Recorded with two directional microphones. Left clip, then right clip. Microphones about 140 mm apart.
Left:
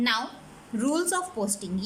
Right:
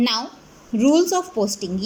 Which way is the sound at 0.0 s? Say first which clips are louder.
Right 4 dB; 20° right (ahead or behind).